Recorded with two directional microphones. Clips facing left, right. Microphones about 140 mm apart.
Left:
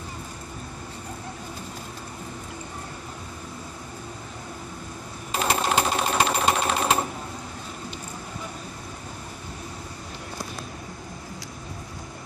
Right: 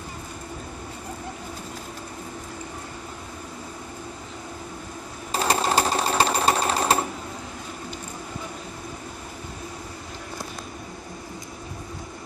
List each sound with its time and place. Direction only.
5.3 s sewing machine: 35° right (ahead or behind)